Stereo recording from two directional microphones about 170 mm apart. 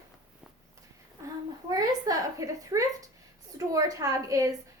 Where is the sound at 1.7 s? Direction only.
20° right (ahead or behind).